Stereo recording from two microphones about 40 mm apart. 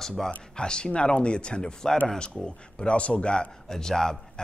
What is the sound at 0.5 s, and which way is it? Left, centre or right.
A man's voice, left.